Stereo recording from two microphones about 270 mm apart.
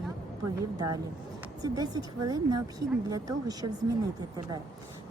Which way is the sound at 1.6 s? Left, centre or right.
Centre.